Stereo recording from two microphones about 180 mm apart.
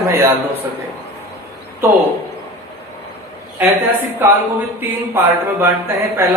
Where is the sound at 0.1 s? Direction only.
15° right (ahead or behind).